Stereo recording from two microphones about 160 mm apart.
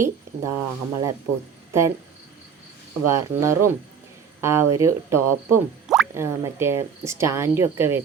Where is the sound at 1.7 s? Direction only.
20° right (ahead or behind).